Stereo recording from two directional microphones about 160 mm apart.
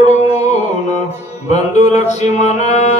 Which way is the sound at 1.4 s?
45° left (ahead or behind).